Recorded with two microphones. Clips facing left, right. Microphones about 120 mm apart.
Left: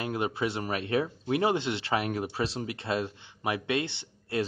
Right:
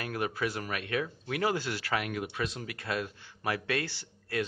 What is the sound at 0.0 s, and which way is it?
Speech, 25° left (ahead or behind).